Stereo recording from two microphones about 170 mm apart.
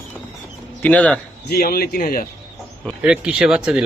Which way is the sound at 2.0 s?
55° left (ahead or behind).